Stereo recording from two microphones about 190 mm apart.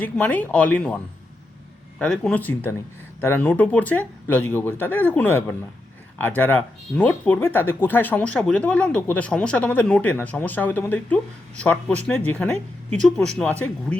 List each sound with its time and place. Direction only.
0.0 s speech: 10° left (ahead or behind)
2.0 s speech: 5° left (ahead or behind)